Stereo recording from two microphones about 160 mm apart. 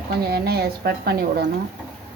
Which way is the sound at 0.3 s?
80° right.